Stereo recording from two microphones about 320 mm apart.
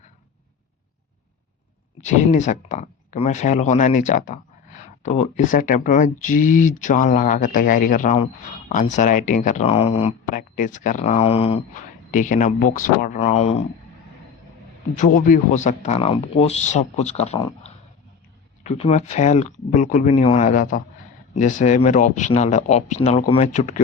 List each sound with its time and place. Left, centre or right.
2.0 s speech: left
14.9 s speech: left
18.7 s speech: left